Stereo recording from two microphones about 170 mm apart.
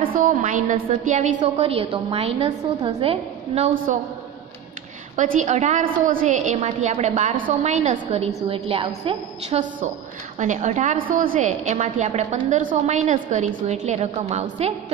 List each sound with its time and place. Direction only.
0.0 s a woman's voice: 50° right (ahead or behind)
3.7 s a woman's voice: 50° right (ahead or behind)
5.1 s a woman's voice: 45° right (ahead or behind)
10.4 s a woman's voice: 45° right (ahead or behind)